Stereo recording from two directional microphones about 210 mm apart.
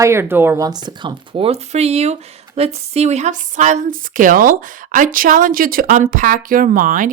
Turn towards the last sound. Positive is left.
turn(degrees=-40)  # may be behind; listen again after turning